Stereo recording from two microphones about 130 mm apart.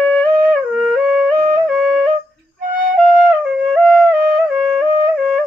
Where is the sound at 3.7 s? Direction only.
5° left (ahead or behind).